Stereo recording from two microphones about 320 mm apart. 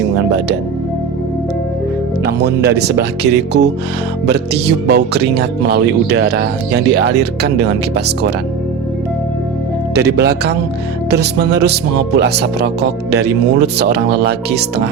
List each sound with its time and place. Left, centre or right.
2.2 s speech: right
4.9 s speech: right
9.9 s speech: right